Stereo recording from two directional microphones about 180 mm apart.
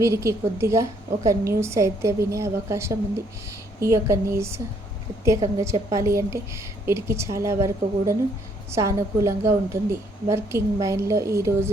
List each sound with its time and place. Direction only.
0.0 s a woman's voice: 15° right (ahead or behind)